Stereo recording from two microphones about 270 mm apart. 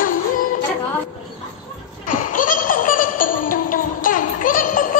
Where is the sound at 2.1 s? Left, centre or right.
Left.